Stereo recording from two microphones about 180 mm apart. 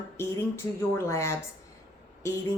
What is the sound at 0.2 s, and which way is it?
Speech, 15° left (ahead or behind).